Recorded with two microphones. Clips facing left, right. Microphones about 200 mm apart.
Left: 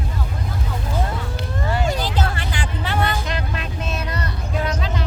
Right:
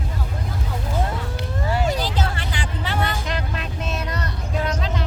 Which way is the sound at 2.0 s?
55° left (ahead or behind).